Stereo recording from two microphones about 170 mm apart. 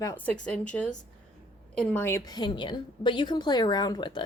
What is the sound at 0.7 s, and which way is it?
A woman's voice, 5° left (ahead or behind).